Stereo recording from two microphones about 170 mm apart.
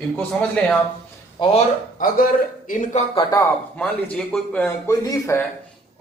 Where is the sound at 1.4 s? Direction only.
25° left (ahead or behind).